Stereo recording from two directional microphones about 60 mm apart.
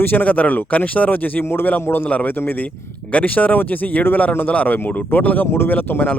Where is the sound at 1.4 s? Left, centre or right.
Left.